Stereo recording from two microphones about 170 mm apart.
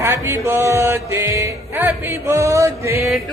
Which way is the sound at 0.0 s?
15° right (ahead or behind).